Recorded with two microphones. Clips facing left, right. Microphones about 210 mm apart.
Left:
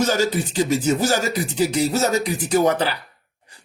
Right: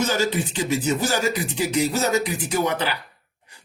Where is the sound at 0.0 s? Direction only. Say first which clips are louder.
Left 2 dB; 40° left (ahead or behind).